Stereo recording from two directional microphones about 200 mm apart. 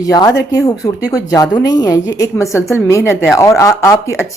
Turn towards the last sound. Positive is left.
turn(degrees=15)  # may be behind; listen again after turning